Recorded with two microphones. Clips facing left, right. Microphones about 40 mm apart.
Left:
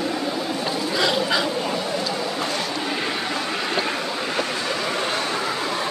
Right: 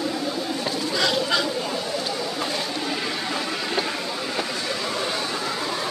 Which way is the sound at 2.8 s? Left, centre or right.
Left.